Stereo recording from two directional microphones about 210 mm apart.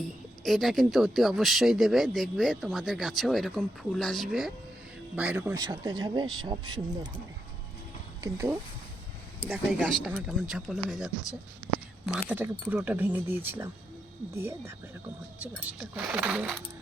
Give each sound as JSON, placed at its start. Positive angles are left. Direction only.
{"t": 0.4, "sound": "speech", "side_deg": 0}
{"t": 8.2, "sound": "speech", "side_deg": -15}
{"t": 9.5, "sound": "speech", "side_deg": 0}